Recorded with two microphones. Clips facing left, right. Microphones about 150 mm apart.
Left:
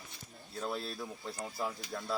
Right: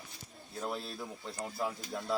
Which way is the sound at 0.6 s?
15° right (ahead or behind).